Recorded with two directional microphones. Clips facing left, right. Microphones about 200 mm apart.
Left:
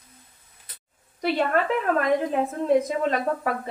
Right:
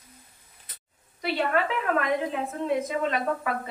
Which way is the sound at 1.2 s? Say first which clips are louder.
Left 3 dB; 40° left (ahead or behind).